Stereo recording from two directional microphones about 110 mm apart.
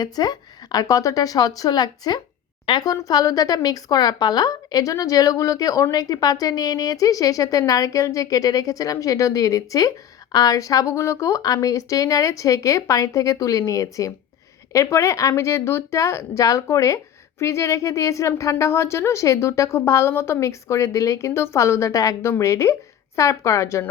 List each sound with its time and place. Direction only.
0.0 s a woman's voice: 40° left (ahead or behind)